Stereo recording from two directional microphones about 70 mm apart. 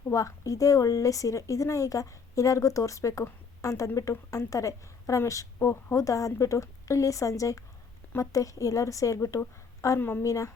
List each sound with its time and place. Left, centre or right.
0.1 s speech: left
10.0 s a woman's voice: left
10.2 s speech: left